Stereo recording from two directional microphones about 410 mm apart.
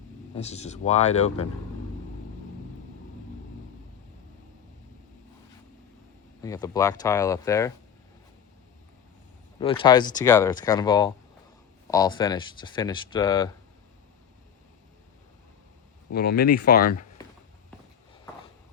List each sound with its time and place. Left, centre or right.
0.3 s speech: centre
6.4 s speech: centre
9.6 s speech: centre
16.1 s speech: left